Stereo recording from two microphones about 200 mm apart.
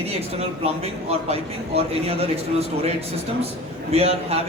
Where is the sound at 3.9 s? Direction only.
30° right (ahead or behind).